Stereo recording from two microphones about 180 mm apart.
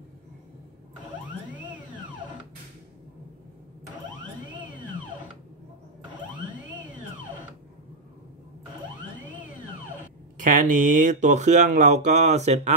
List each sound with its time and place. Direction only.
10.4 s speech: 45° right (ahead or behind)